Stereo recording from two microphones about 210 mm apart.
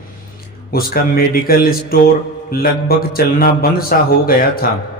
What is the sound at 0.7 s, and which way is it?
A man's voice, 45° left (ahead or behind).